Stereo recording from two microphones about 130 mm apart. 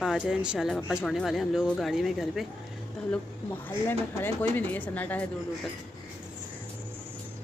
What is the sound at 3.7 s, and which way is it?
Speech, 15° left (ahead or behind).